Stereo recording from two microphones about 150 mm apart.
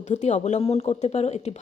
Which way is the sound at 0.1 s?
50° left (ahead or behind).